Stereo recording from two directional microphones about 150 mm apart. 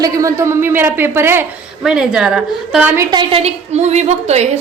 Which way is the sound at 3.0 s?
30° right (ahead or behind).